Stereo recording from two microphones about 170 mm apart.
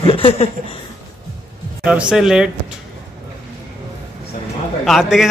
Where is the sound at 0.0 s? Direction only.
30° left (ahead or behind).